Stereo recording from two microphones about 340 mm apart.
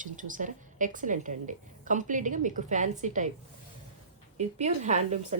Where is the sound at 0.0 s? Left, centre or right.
Right.